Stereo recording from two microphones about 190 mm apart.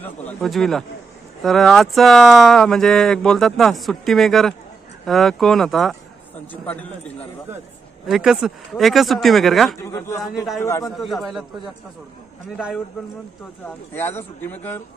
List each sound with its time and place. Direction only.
0.0 s speech: 5° left (ahead or behind)
8.1 s speech: centre (ahead or behind)
10.6 s speech: 15° left (ahead or behind)
11.0 s speech: centre (ahead or behind)
12.5 s speech: 5° right (ahead or behind)
13.9 s speech: 10° left (ahead or behind)